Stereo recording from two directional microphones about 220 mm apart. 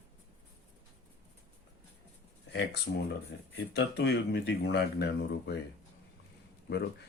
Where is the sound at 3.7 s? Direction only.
50° left (ahead or behind).